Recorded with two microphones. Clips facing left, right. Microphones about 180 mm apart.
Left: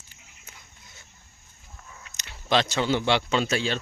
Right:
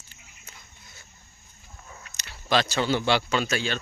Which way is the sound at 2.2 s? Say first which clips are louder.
Left 1 dB; 20° left (ahead or behind).